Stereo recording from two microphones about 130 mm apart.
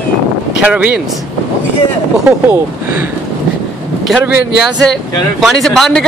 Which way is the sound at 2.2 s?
15° right (ahead or behind).